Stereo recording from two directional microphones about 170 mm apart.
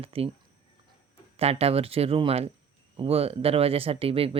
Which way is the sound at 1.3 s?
35° right (ahead or behind).